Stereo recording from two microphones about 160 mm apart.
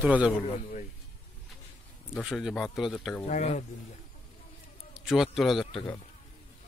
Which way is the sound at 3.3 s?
45° left (ahead or behind).